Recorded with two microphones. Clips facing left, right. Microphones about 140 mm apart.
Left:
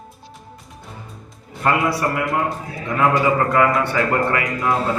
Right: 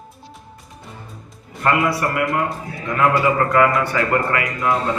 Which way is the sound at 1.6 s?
30° left (ahead or behind).